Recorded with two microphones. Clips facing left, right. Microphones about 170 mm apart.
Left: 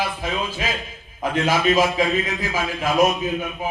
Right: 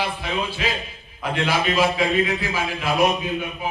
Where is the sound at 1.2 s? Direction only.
45° left (ahead or behind).